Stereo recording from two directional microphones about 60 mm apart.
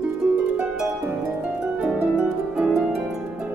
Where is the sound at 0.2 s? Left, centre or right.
Centre.